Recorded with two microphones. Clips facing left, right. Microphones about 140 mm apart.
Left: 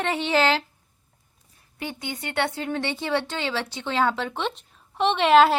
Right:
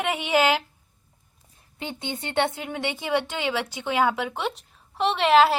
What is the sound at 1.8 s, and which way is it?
A woman's voice, 20° right (ahead or behind).